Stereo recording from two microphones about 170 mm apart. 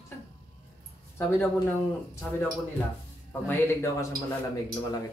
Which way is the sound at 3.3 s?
15° left (ahead or behind).